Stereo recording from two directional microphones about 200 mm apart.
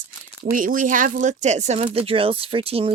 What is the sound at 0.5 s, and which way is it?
A woman's voice, 40° right (ahead or behind).